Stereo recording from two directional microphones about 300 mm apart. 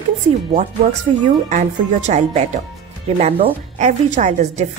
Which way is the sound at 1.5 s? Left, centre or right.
Right.